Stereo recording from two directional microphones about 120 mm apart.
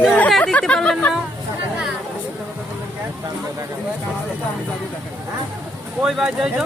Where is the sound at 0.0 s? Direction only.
10° left (ahead or behind).